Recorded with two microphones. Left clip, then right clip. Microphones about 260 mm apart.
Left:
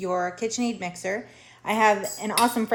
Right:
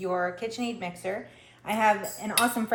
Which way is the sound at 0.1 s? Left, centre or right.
Left.